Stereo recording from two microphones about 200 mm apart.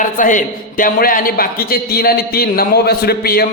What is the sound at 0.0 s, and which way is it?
A man's voice, 40° left (ahead or behind).